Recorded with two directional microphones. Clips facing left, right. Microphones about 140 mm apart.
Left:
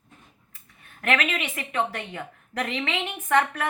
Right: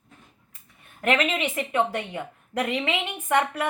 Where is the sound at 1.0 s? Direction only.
25° right (ahead or behind).